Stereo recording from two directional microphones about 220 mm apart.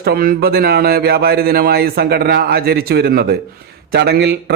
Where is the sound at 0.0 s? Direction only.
45° right (ahead or behind).